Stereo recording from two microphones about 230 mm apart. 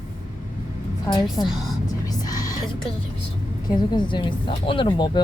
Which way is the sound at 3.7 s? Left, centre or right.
Centre.